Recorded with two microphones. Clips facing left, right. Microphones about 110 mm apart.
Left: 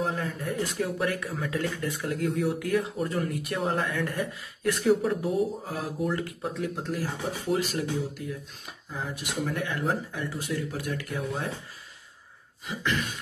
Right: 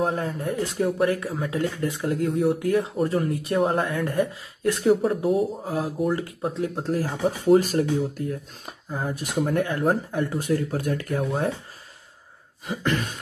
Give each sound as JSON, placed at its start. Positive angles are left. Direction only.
{"t": 0.0, "sound": "speech", "side_deg": -35}
{"t": 12.6, "sound": "speech", "side_deg": -45}